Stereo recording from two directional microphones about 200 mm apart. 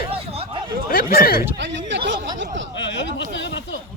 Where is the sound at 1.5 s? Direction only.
60° right (ahead or behind).